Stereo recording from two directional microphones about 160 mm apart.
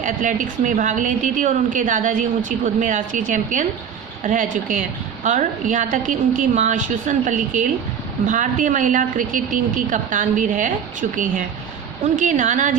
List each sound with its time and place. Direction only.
0.0 s a woman's voice: 50° right (ahead or behind)
12.0 s a woman's voice: 50° right (ahead or behind)